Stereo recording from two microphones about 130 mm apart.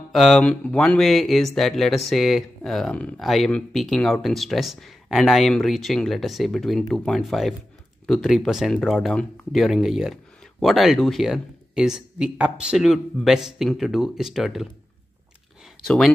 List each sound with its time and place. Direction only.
0.1 s speech: centre (ahead or behind)
15.8 s speech: centre (ahead or behind)